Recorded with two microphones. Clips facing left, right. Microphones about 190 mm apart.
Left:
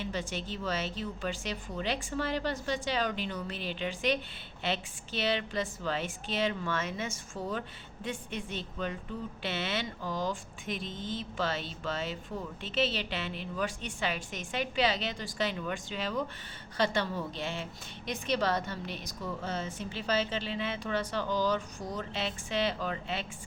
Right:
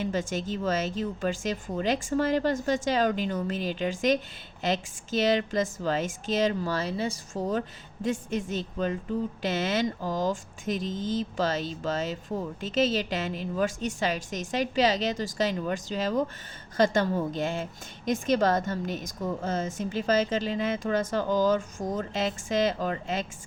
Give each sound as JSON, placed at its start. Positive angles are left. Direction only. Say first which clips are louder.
{"t": 0.0, "sound": "a woman's voice", "louder": "right 7 dB", "side_deg": -45}